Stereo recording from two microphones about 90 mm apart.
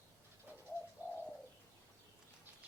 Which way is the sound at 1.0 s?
20° right (ahead or behind).